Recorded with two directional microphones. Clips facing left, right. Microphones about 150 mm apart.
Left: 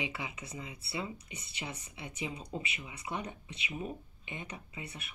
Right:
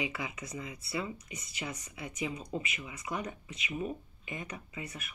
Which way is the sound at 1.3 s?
30° left (ahead or behind).